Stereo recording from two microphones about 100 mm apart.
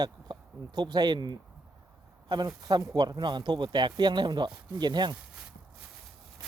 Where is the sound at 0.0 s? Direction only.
45° right (ahead or behind).